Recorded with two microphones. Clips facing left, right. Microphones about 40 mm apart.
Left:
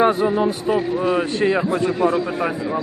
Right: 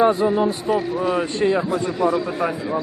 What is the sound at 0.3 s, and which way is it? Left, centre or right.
A man's voice, centre.